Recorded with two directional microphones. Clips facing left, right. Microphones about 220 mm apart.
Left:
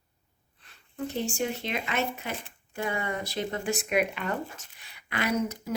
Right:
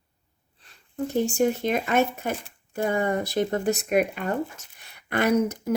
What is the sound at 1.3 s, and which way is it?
Speech, 50° right (ahead or behind).